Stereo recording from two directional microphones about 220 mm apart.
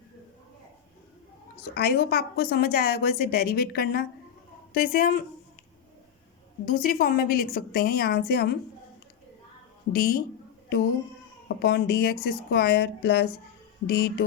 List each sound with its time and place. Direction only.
1.6 s a woman's voice: 45° left (ahead or behind)
6.7 s a woman's voice: 40° left (ahead or behind)
9.9 s a woman's voice: 40° left (ahead or behind)
11.4 s a woman's voice: 45° left (ahead or behind)